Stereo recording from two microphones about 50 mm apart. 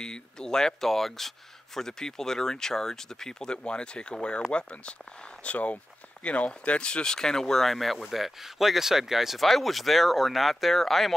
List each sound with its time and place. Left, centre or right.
0.0 s speech: centre